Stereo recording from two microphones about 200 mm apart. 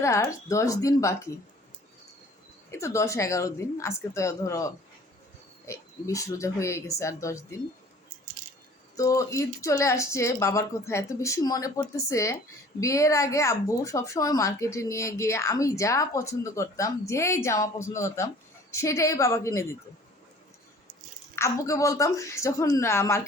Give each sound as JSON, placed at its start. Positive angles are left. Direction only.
{"t": 0.0, "sound": "a woman's voice", "side_deg": 15}
{"t": 2.6, "sound": "a woman's voice", "side_deg": 15}
{"t": 9.0, "sound": "a woman's voice", "side_deg": 15}
{"t": 21.3, "sound": "a woman's voice", "side_deg": 15}